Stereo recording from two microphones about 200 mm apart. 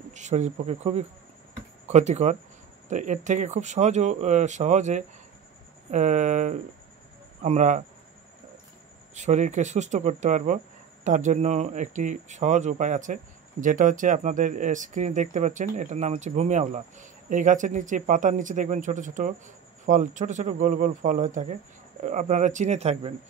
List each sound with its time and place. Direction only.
0.1 s speech: 35° right (ahead or behind)
9.1 s speech: 35° right (ahead or behind)